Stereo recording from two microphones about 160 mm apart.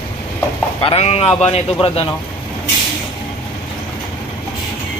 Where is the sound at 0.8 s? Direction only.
35° left (ahead or behind).